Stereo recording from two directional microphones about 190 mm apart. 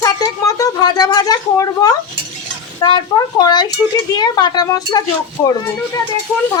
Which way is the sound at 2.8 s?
20° left (ahead or behind).